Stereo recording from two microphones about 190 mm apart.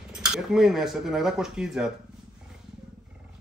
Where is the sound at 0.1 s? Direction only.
5° right (ahead or behind).